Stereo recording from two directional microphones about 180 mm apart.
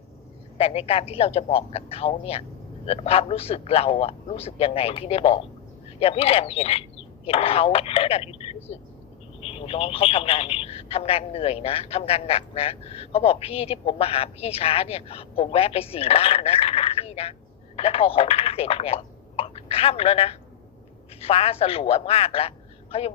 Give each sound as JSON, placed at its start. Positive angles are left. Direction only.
{"t": 0.6, "sound": "speech", "side_deg": 35}